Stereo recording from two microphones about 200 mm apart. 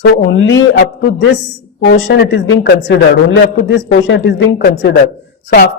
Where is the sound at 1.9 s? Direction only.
60° left (ahead or behind).